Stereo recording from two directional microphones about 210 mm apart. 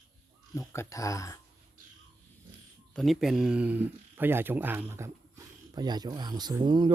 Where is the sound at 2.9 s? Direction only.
Centre (ahead or behind); by 6.9 s 20° right (ahead or behind).